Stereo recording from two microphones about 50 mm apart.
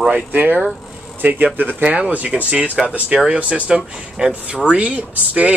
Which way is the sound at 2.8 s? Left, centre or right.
Centre.